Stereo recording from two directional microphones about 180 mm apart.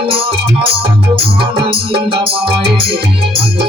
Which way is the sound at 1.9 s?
30° right (ahead or behind).